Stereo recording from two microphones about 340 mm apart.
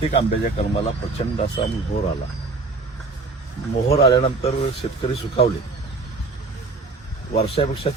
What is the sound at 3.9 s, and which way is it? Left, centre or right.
Speech, centre.